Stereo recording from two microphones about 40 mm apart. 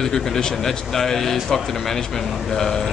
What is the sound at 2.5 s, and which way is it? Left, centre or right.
Speech, centre.